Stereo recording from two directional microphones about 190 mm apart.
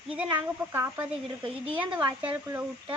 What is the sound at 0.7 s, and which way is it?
Speech, 15° right (ahead or behind).